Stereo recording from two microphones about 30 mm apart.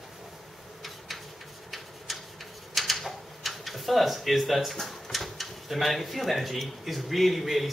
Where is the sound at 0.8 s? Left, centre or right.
Centre.